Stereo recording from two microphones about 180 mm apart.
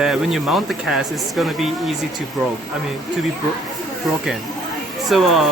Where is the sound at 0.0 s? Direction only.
Centre (ahead or behind).